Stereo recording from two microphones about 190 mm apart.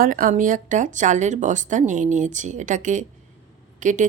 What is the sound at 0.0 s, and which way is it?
Speech, 45° right (ahead or behind).